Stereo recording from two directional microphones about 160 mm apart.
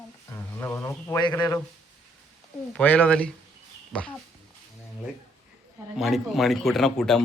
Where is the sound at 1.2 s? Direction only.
25° left (ahead or behind).